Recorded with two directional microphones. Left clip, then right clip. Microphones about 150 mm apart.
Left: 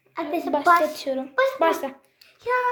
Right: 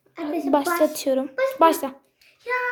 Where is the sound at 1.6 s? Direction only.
30° right (ahead or behind).